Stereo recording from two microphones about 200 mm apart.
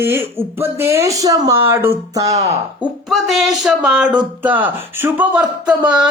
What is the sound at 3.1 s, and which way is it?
Speech, centre (ahead or behind).